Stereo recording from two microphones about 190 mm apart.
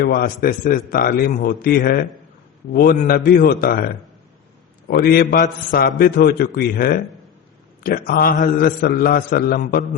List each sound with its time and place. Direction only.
0.0 s a man's voice: 50° left (ahead or behind)